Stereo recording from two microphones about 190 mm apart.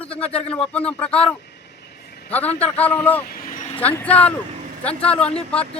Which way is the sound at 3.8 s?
10° left (ahead or behind).